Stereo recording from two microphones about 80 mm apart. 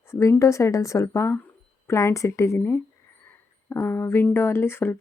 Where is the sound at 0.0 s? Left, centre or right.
Left.